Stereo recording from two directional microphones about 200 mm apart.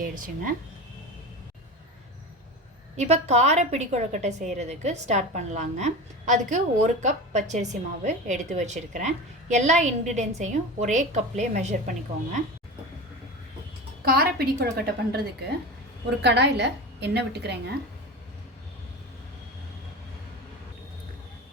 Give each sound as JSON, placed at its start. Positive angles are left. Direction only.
{"t": 2.9, "sound": "a woman's voice", "side_deg": -35}
{"t": 14.0, "sound": "a woman's voice", "side_deg": -50}